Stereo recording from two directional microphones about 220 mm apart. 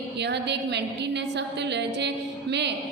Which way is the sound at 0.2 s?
50° right (ahead or behind).